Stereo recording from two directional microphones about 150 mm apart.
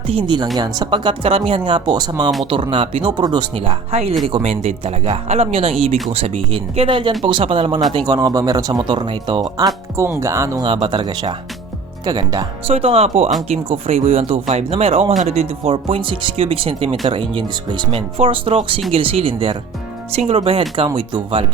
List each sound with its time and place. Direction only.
0.1 s speech: 35° right (ahead or behind)
7.9 s speech: 25° right (ahead or behind)
10.6 s speech: 30° right (ahead or behind)
12.6 s speech: 40° right (ahead or behind)